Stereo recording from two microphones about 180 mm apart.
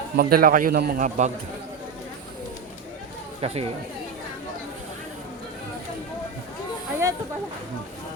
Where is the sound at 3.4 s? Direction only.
35° right (ahead or behind).